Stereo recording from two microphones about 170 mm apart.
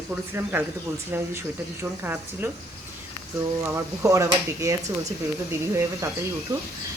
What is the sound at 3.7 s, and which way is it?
Speech, 15° right (ahead or behind).